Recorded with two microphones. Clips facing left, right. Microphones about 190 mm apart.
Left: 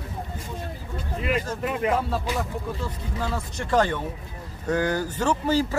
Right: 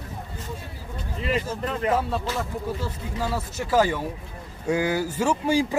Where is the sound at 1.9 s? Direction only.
Centre (ahead or behind).